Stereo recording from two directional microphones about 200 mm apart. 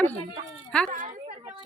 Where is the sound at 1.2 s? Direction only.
25° right (ahead or behind).